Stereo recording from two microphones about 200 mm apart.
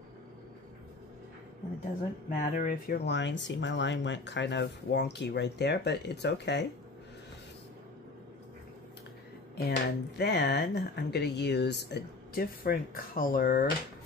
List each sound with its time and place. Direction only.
2.2 s speech: 40° left (ahead or behind)
3.1 s speech: 60° left (ahead or behind)
9.7 s speech: 55° left (ahead or behind)